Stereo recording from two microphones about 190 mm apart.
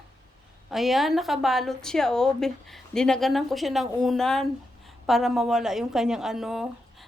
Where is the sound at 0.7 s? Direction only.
Centre (ahead or behind).